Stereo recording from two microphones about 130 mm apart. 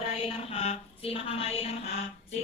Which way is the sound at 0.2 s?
50° left (ahead or behind).